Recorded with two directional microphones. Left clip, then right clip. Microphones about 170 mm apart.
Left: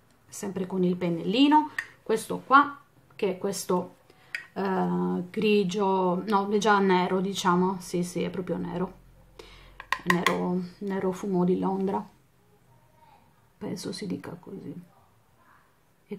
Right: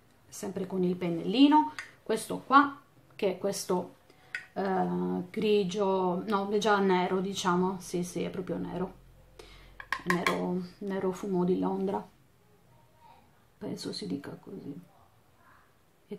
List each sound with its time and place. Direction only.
0.3 s speech: 15° left (ahead or behind)
9.4 s wood block: 15° left (ahead or behind)
9.8 s a sound: 40° left (ahead or behind)
10.4 s speech: 10° left (ahead or behind)
13.6 s speech: 15° left (ahead or behind)